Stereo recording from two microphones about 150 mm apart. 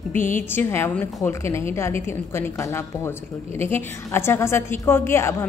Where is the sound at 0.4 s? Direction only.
15° left (ahead or behind).